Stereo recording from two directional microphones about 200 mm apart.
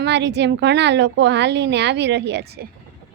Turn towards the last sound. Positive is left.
turn(degrees=-55)  # may be behind; listen again after turning